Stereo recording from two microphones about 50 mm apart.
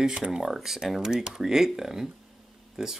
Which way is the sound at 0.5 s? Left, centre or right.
Centre.